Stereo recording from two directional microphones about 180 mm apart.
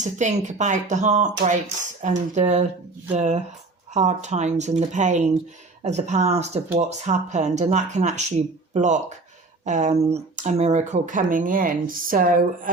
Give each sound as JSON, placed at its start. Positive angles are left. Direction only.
{"t": 0.0, "sound": "speech", "side_deg": -40}